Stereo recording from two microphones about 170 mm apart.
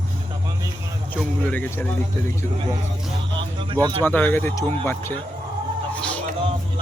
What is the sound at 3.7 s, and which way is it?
Speech, 25° right (ahead or behind).